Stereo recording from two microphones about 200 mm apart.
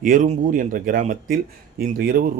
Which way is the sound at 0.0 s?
40° right (ahead or behind).